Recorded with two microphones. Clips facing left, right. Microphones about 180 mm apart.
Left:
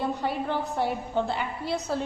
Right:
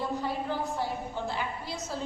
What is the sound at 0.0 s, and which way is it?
A woman's voice, 65° left (ahead or behind).